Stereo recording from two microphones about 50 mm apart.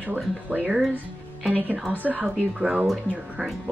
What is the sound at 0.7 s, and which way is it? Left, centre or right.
Speech, centre.